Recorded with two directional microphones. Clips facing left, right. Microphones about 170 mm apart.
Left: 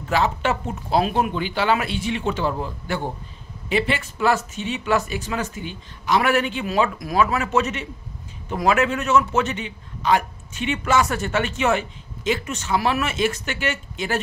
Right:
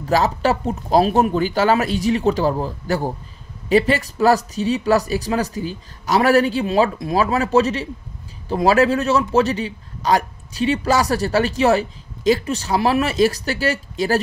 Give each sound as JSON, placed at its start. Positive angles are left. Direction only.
{"t": 0.0, "sound": "a man's voice", "side_deg": -40}